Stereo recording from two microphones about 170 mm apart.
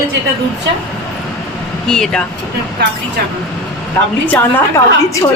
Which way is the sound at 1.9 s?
5° left (ahead or behind).